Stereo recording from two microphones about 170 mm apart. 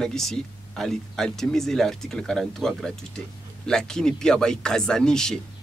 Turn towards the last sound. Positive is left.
turn(degrees=5)  # may be behind; listen again after turning